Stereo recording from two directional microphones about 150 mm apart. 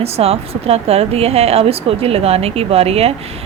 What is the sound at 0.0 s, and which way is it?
Speech, 40° right (ahead or behind).